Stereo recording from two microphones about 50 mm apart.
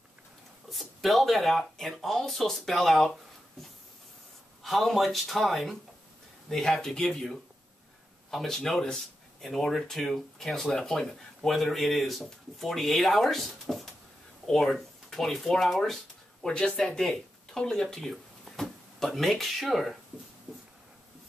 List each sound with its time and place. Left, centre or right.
0.7 s speech: centre
4.6 s speech: centre
16.4 s speech: centre